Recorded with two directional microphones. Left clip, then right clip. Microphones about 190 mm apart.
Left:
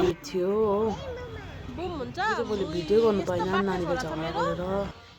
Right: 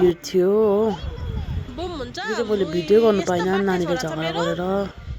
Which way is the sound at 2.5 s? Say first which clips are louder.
Right 7 dB; 30° right (ahead or behind).